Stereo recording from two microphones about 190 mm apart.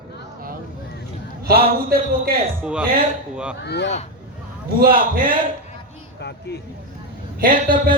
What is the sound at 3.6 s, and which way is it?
Speech, 60° left (ahead or behind).